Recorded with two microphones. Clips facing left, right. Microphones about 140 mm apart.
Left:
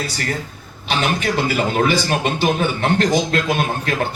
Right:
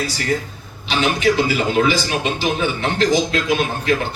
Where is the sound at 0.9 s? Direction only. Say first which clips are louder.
Right 3 dB; 50° left (ahead or behind).